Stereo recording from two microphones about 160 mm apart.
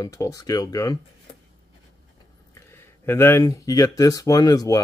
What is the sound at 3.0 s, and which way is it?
Speech, 15° left (ahead or behind).